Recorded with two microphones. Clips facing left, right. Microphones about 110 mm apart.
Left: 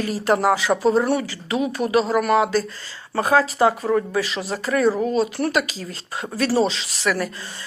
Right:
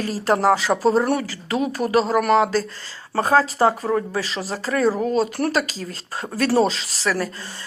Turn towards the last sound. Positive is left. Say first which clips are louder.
# even
turn(degrees=-35)  # may be behind; listen again after turning